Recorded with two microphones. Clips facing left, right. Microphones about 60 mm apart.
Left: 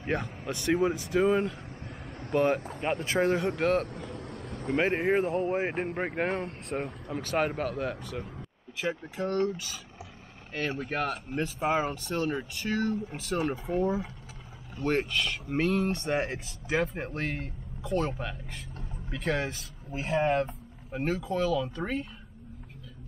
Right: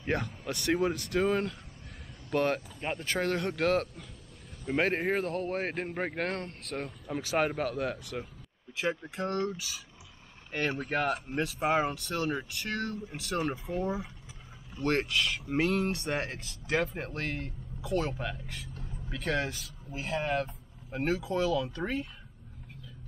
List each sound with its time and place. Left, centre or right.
0.1 s speech: centre; by 3.3 s left
3.3 s speech: centre
3.9 s vehicle: left
4.6 s speech: centre
5.2 s speech: centre
7.2 s speech: centre
11.1 s speech: centre
19.9 s speech: left
20.9 s speech: centre